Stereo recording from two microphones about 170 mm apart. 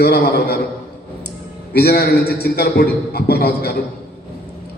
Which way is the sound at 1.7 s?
65° left (ahead or behind).